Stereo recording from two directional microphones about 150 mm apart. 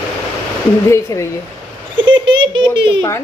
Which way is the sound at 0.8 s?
20° left (ahead or behind).